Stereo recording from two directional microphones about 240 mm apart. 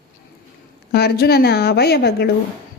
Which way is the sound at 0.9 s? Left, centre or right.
Left.